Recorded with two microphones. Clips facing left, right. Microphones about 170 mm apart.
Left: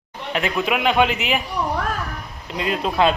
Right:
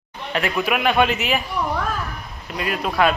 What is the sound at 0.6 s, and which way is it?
Speech, 15° left (ahead or behind).